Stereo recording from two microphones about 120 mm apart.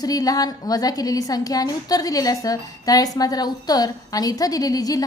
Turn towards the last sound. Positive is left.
turn(degrees=30)  # may be behind; listen again after turning